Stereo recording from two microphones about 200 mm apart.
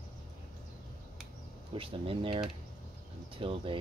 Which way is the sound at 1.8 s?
25° right (ahead or behind).